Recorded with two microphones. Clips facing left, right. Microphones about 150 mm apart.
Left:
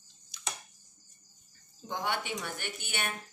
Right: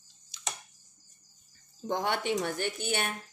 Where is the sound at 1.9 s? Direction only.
50° right (ahead or behind).